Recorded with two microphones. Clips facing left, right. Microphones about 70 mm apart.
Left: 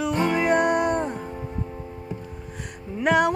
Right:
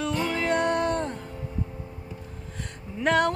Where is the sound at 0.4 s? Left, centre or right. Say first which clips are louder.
Left 3 dB; centre.